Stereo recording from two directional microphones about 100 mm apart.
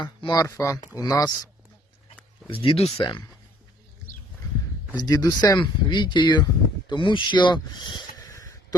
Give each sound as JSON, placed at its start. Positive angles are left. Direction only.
{"t": 0.0, "sound": "speech", "side_deg": 50}
{"t": 0.3, "sound": "speech", "side_deg": 30}
{"t": 2.5, "sound": "speech", "side_deg": 65}
{"t": 3.0, "sound": "speech", "side_deg": 50}
{"t": 4.9, "sound": "speech", "side_deg": 40}
{"t": 8.3, "sound": "a sound", "side_deg": 30}